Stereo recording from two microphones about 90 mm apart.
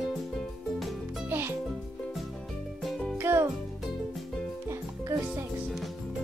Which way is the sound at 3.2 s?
25° right (ahead or behind).